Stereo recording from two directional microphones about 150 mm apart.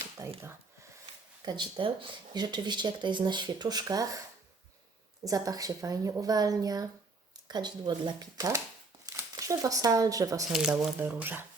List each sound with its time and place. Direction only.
0.2 s a sound: 20° right (ahead or behind)
1.5 s speech: 35° right (ahead or behind)
5.2 s speech: 25° right (ahead or behind)
10.5 s speech: 5° right (ahead or behind)
11.0 s speech: 15° right (ahead or behind)